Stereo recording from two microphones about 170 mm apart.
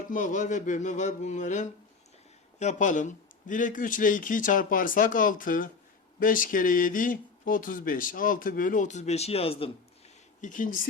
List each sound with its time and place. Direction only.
0.1 s speech: 45° left (ahead or behind)
10.4 s speech: 50° left (ahead or behind)